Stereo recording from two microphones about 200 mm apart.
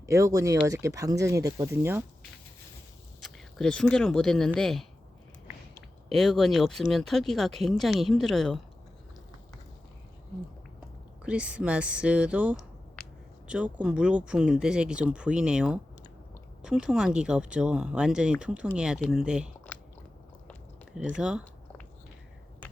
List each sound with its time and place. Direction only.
0.0 s speech: 15° right (ahead or behind)
3.2 s speech: centre (ahead or behind)
6.1 s speech: centre (ahead or behind)
11.2 s speech: 5° right (ahead or behind)
13.0 s a sound: 5° left (ahead or behind)
13.5 s speech: 5° right (ahead or behind)
20.5 s chewing: centre (ahead or behind)
21.2 s speech: 5° right (ahead or behind)